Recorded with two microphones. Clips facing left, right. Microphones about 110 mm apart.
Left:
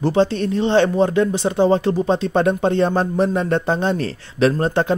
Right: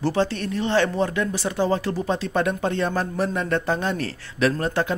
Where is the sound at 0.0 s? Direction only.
20° left (ahead or behind).